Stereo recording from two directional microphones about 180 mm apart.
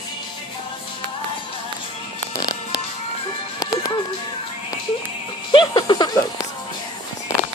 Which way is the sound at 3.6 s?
20° left (ahead or behind).